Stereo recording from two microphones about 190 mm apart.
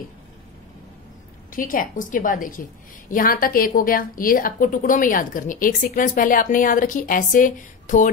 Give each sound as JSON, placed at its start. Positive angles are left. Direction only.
{"t": 1.5, "sound": "a woman's voice", "side_deg": 45}